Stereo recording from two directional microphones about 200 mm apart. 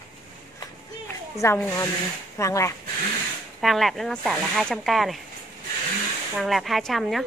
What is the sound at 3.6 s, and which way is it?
Speech, centre (ahead or behind).